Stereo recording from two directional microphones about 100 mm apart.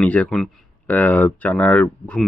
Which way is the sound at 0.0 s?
10° left (ahead or behind).